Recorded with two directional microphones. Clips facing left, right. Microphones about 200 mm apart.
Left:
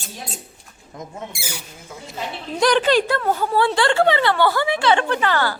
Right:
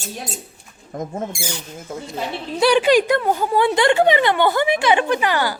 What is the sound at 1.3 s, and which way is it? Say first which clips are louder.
Speech: right 5 dB; 5° left (ahead or behind).